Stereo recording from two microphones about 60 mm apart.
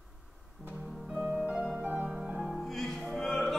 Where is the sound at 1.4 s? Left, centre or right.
Centre.